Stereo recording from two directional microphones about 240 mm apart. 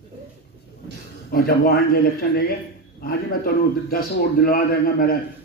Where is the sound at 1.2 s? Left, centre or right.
Left.